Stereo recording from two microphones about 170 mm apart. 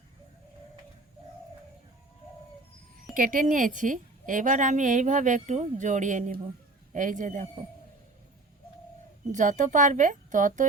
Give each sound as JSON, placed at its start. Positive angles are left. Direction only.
{"t": 3.2, "sound": "a woman's voice", "side_deg": -55}
{"t": 9.3, "sound": "a woman's voice", "side_deg": -45}